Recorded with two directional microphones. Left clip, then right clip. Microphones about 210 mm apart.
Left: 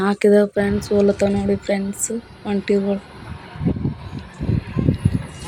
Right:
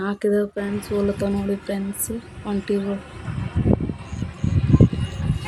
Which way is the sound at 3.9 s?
50° right (ahead or behind).